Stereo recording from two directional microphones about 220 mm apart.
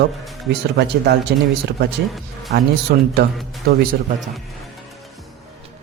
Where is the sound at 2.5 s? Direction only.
50° right (ahead or behind).